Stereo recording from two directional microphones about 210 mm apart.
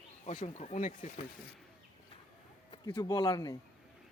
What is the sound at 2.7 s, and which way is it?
Speech, 15° left (ahead or behind).